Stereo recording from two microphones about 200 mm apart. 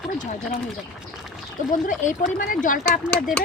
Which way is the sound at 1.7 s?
40° left (ahead or behind).